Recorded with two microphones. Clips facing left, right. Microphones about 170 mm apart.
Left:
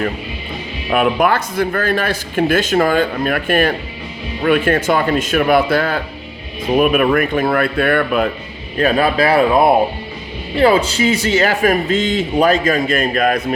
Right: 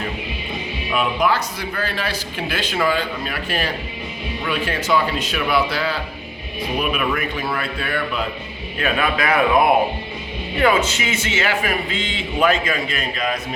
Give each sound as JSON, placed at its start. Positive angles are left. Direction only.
{"t": 0.9, "sound": "speech", "side_deg": 55}
{"t": 8.8, "sound": "a man's voice", "side_deg": 35}